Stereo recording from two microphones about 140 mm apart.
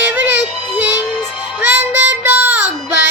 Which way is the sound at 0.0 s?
15° right (ahead or behind).